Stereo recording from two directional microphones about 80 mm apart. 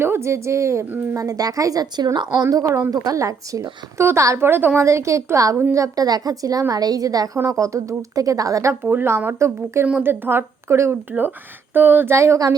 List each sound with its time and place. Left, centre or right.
0.0 s a woman's voice: right
1.1 s a woman's voice: right
8.8 s speech: right